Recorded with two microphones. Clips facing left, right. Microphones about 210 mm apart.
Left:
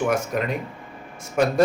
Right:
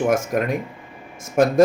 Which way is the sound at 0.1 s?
45° right (ahead or behind).